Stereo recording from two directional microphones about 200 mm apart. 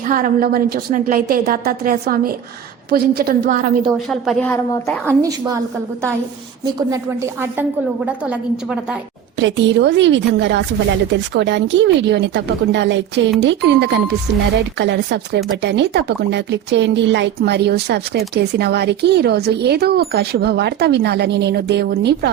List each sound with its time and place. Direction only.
0.1 s a woman's voice: 45° right (ahead or behind)
3.9 s a woman's voice: centre (ahead or behind)
6.7 s a woman's voice: 15° right (ahead or behind)
9.4 s speech: 65° right (ahead or behind)